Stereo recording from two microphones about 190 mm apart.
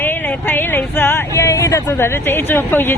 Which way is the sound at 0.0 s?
10° left (ahead or behind).